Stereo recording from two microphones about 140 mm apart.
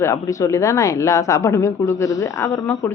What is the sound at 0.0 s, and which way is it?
A woman's voice, 20° left (ahead or behind).